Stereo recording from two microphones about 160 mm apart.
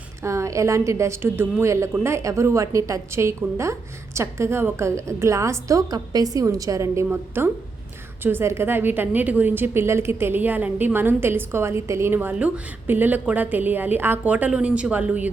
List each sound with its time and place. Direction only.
0.2 s a woman's voice: 20° right (ahead or behind)